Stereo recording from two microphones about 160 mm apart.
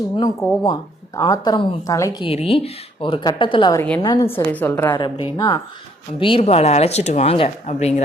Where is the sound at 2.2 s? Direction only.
35° left (ahead or behind); by 4.9 s 15° left (ahead or behind).